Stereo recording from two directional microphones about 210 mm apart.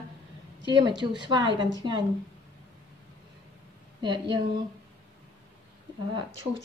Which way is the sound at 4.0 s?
20° right (ahead or behind).